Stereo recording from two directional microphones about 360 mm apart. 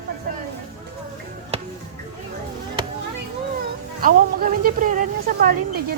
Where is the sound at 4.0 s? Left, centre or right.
Right.